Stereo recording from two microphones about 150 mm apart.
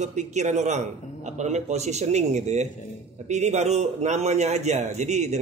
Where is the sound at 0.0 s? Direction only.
50° right (ahead or behind).